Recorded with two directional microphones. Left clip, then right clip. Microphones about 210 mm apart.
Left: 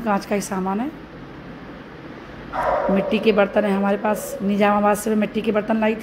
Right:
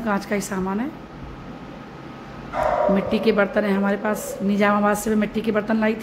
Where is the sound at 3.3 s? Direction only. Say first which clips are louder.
Left 2 dB; centre (ahead or behind).